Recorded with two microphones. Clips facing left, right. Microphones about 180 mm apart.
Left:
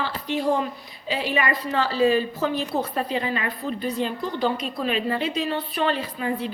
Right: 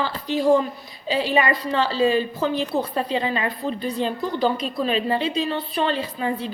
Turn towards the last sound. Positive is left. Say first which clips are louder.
# right 1 dB
turn(degrees=-30)  # may be behind; listen again after turning